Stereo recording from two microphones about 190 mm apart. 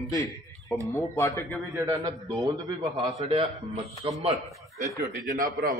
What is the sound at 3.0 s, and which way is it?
A man's voice, 30° right (ahead or behind).